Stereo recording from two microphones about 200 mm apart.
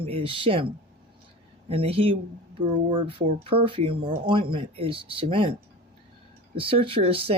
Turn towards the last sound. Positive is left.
turn(degrees=-30)  # may be behind; listen again after turning